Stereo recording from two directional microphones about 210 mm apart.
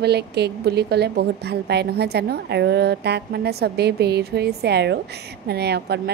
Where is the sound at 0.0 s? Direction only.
50° right (ahead or behind).